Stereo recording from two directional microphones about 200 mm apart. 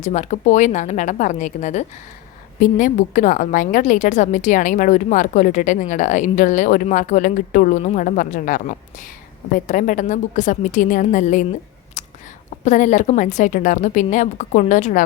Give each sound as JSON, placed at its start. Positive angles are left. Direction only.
{"t": 0.0, "sound": "a woman's voice", "side_deg": 35}
{"t": 12.0, "sound": "a sound", "side_deg": 35}
{"t": 12.6, "sound": "a woman's voice", "side_deg": 40}